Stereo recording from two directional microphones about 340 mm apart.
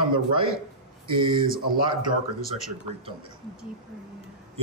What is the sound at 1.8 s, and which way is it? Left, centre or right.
Speech, centre.